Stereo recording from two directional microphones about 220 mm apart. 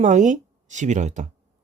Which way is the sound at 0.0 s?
35° right (ahead or behind).